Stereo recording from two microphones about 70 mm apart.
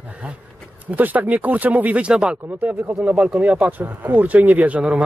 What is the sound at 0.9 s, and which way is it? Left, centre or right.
Speech, right.